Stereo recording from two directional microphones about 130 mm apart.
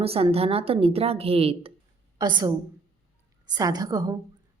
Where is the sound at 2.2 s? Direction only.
35° right (ahead or behind).